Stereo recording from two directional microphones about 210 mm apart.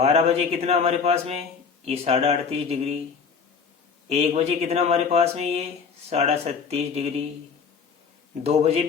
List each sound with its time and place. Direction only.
0.0 s speech: 30° right (ahead or behind)
4.1 s speech: 30° right (ahead or behind)
8.4 s speech: 30° right (ahead or behind)